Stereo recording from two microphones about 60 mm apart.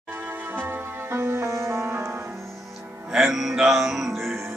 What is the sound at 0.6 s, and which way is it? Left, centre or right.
Music, right.